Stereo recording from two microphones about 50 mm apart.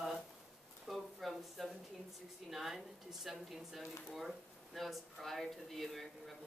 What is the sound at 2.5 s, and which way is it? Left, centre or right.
A woman's voice, centre.